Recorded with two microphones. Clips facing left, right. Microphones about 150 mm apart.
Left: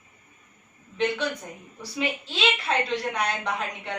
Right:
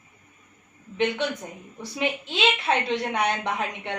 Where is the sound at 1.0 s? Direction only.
20° right (ahead or behind).